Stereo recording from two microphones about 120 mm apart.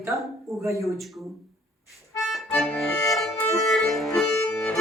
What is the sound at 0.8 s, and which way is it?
Speech, centre (ahead or behind).